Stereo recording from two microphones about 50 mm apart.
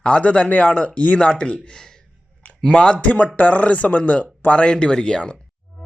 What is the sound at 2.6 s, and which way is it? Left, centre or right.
Speech, centre.